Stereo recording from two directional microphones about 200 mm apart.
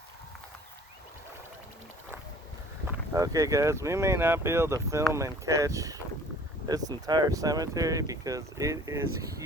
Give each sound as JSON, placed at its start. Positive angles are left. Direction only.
{"t": 3.1, "sound": "speech", "side_deg": -15}